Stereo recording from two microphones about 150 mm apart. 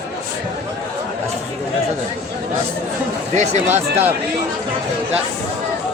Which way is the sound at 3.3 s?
50° right (ahead or behind).